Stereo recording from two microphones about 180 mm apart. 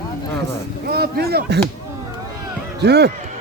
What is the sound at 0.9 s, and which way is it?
Speech, 60° right (ahead or behind).